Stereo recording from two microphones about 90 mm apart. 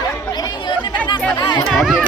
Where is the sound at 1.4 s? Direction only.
50° left (ahead or behind).